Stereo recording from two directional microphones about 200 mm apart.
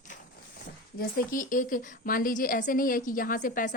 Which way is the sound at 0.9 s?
45° left (ahead or behind).